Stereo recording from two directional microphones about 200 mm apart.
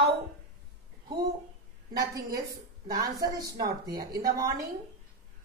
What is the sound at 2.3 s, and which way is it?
Speech, 45° right (ahead or behind).